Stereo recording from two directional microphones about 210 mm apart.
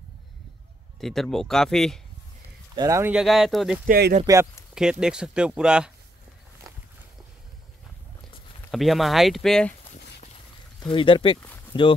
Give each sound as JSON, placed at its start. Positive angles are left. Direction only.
{"t": 1.0, "sound": "speech", "side_deg": 0}
{"t": 2.7, "sound": "speech", "side_deg": -15}
{"t": 3.8, "sound": "speech", "side_deg": -45}
{"t": 5.0, "sound": "speech", "side_deg": -5}
{"t": 8.7, "sound": "speech", "side_deg": 0}
{"t": 10.8, "sound": "speech", "side_deg": 25}